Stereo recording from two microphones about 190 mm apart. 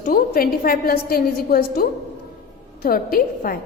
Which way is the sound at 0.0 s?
50° left (ahead or behind).